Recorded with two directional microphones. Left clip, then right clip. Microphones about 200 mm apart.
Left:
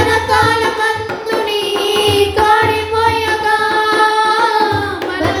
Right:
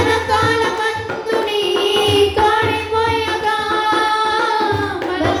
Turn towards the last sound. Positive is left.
turn(degrees=20)  # may be behind; listen again after turning